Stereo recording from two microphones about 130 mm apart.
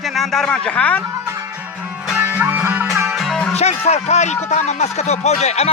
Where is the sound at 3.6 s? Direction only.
55° left (ahead or behind).